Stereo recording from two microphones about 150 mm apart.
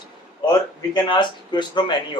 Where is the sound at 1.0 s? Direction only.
30° left (ahead or behind).